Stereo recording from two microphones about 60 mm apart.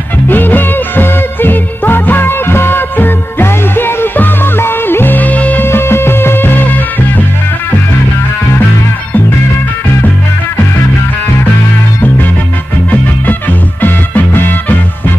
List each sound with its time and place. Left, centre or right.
0.3 s music: left
5.7 s music: left
12.9 s music: left